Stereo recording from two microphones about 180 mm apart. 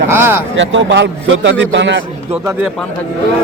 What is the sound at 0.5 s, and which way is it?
A man's voice, 90° right.